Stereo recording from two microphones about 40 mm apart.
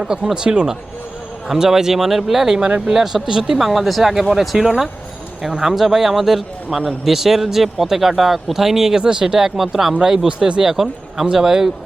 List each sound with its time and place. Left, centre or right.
0.3 s speech: right
1.5 s speech: centre
2.6 s speech: right
2.9 s speech: centre
3.6 s speech: centre